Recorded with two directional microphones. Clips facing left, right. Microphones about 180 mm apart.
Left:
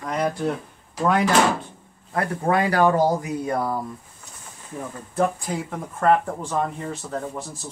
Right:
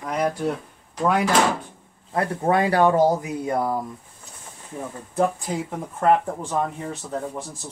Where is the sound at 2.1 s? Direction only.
25° right (ahead or behind).